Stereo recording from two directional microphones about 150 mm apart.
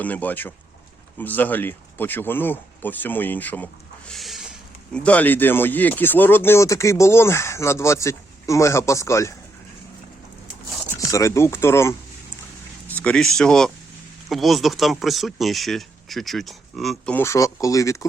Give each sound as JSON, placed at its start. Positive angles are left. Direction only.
{"t": 0.0, "sound": "speech", "side_deg": 10}
{"t": 4.1, "sound": "a sound", "side_deg": 0}
{"t": 4.9, "sound": "speech", "side_deg": 10}
{"t": 10.9, "sound": "speech", "side_deg": 20}
{"t": 17.2, "sound": "speech", "side_deg": 20}